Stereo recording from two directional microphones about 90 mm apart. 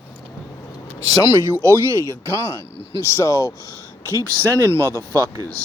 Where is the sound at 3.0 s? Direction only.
35° left (ahead or behind).